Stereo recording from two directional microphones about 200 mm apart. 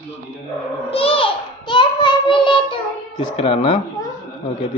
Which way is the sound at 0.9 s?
25° left (ahead or behind).